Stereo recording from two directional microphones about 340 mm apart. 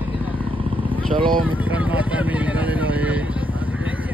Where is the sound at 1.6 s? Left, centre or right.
Centre.